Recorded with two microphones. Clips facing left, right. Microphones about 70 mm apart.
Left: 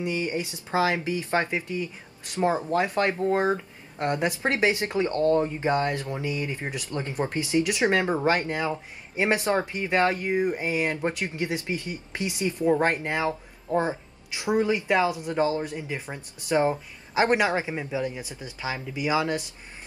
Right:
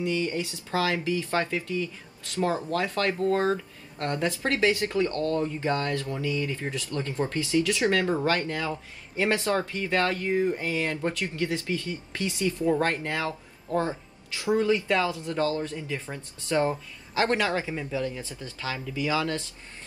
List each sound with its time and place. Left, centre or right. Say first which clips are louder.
0.0 s speech: even; left